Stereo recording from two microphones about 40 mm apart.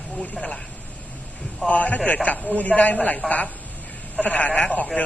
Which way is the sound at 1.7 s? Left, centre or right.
Left.